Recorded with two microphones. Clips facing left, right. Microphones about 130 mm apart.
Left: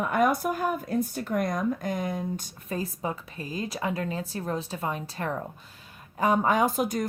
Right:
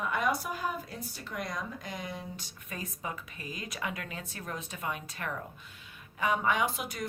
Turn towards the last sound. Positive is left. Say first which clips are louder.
# left 8 dB
turn(degrees=40)  # may be behind; listen again after turning